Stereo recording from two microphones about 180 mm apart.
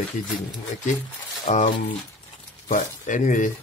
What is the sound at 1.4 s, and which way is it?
A man's voice, 45° left (ahead or behind).